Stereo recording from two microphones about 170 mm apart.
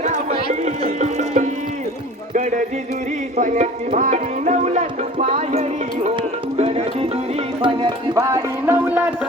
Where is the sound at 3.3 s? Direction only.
45° right (ahead or behind).